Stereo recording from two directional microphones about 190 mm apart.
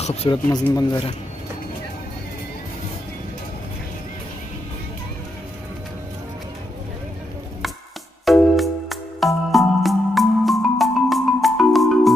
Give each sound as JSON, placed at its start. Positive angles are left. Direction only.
{"t": 0.0, "sound": "speech", "side_deg": 35}
{"t": 8.3, "sound": "music", "side_deg": 0}